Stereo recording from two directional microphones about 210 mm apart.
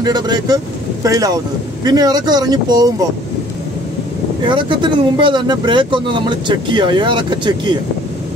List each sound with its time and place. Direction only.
0.0 s speech: 20° right (ahead or behind)
4.4 s speech: 25° right (ahead or behind)